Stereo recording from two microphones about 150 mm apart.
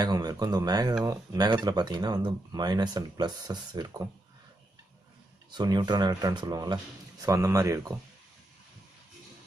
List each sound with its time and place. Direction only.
0.0 s speech: 25° right (ahead or behind)
5.5 s speech: 30° right (ahead or behind)